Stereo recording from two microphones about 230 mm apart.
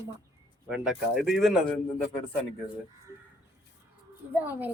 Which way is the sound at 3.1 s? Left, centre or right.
Centre.